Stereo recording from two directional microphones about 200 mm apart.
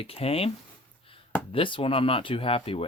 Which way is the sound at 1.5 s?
25° left (ahead or behind).